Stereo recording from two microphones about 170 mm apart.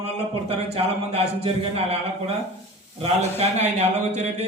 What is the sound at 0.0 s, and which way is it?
A man's voice, 35° right (ahead or behind).